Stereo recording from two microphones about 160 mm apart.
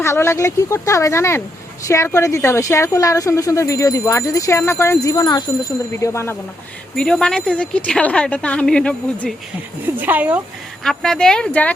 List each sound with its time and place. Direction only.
0.0 s a woman's voice: 15° left (ahead or behind)
6.9 s speech: 5° left (ahead or behind)
10.0 s speech: 10° right (ahead or behind)
10.8 s a woman's voice: 5° left (ahead or behind)